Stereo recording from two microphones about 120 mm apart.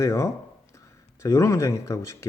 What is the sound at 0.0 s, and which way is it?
Speech, 25° left (ahead or behind).